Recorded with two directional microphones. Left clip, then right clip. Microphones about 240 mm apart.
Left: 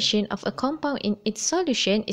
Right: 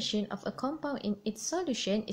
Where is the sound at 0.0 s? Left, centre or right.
Left.